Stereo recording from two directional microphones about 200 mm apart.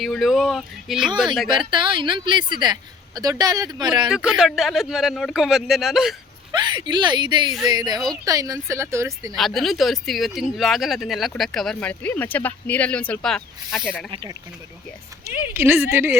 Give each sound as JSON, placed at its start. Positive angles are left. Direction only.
{"t": 0.0, "sound": "speech", "side_deg": 0}
{"t": 1.5, "sound": "speech", "side_deg": -25}
{"t": 4.1, "sound": "speech", "side_deg": -5}
{"t": 6.6, "sound": "speech", "side_deg": -25}
{"t": 9.3, "sound": "speech", "side_deg": 0}
{"t": 14.1, "sound": "speech", "side_deg": -20}
{"t": 15.5, "sound": "speech", "side_deg": -10}